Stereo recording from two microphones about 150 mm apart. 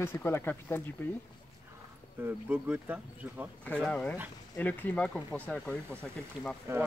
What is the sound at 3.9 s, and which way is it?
Speech, 10° left (ahead or behind).